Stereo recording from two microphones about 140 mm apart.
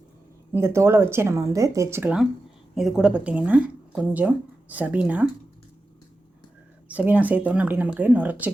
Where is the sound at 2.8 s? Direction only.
5° right (ahead or behind).